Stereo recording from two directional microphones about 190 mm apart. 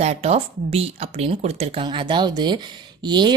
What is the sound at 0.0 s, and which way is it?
Speech, 35° right (ahead or behind).